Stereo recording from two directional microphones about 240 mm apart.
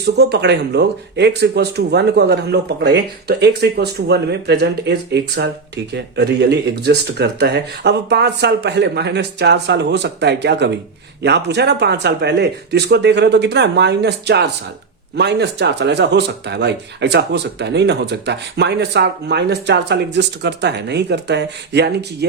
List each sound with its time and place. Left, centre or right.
0.0 s speech: right